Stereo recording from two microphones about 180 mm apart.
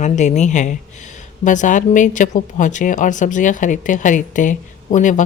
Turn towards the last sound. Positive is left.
turn(degrees=45)  # may be behind; listen again after turning